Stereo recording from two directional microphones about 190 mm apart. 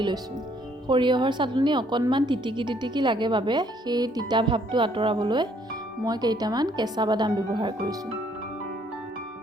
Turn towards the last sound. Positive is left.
turn(degrees=-20)  # may be behind; listen again after turning